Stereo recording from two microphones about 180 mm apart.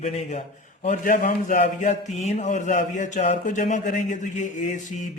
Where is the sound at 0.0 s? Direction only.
40° left (ahead or behind).